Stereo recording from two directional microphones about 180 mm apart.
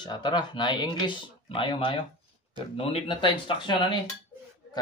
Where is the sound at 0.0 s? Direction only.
25° left (ahead or behind).